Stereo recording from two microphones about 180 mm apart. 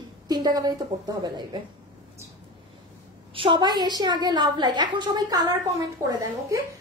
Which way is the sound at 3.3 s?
25° right (ahead or behind).